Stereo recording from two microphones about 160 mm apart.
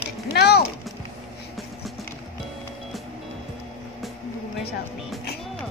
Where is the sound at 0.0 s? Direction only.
85° left.